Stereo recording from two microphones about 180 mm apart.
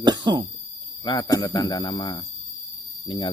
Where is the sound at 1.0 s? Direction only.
25° left (ahead or behind).